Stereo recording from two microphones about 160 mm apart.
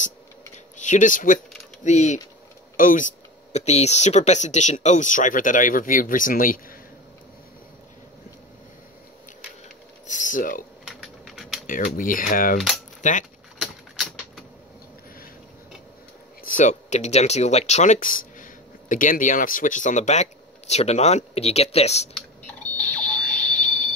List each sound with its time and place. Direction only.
0.7 s speech: 50° left (ahead or behind)
2.8 s speech: 60° left (ahead or behind)
3.5 s speech: 45° left (ahead or behind); by 6.8 s 60° left (ahead or behind)
10.0 s a sound: 50° left (ahead or behind)
10.9 s typing: centre (ahead or behind)
11.6 s speech: 60° left (ahead or behind)
12.5 s speech: centre (ahead or behind)
13.0 s speech: 50° left (ahead or behind)
13.6 s a sound: centre (ahead or behind)
16.4 s speech: 50° left (ahead or behind)
22.5 s alarm: 10° left (ahead or behind)